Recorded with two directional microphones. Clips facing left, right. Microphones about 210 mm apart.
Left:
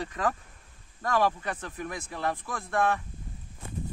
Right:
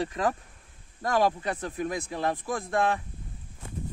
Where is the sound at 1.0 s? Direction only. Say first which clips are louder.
Right 2 dB; 15° right (ahead or behind).